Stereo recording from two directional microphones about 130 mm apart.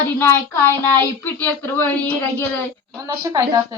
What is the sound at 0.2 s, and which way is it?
Speech, 15° left (ahead or behind).